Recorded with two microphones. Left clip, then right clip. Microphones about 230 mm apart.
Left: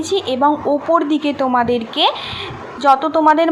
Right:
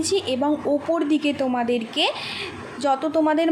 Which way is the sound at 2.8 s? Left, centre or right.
Centre.